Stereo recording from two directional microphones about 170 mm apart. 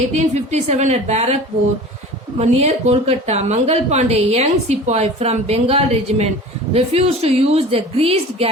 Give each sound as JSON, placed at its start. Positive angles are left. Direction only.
{"t": 0.1, "sound": "a woman's voice", "side_deg": -40}
{"t": 2.4, "sound": "a woman's voice", "side_deg": -40}